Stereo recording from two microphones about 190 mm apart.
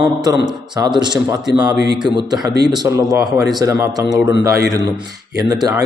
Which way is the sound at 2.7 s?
20° right (ahead or behind).